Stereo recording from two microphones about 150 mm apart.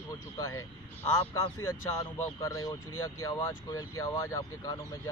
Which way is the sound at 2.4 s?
20° left (ahead or behind).